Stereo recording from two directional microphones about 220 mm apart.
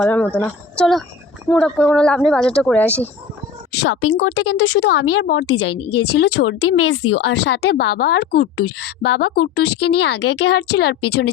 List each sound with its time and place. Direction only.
0.0 s a woman's voice: 5° left (ahead or behind)
3.7 s speech: 65° left (ahead or behind)
6.3 s speech: 70° left (ahead or behind); by 11.2 s 50° left (ahead or behind)